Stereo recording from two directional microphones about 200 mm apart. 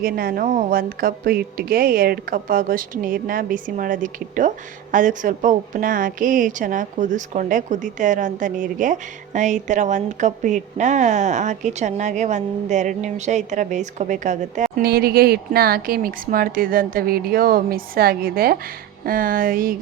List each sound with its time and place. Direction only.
0.0 s a woman's voice: 45° right (ahead or behind)